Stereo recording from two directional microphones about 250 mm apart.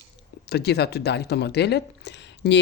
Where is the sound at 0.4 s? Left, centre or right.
Left.